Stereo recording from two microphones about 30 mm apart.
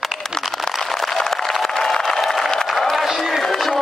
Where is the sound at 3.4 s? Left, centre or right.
Centre.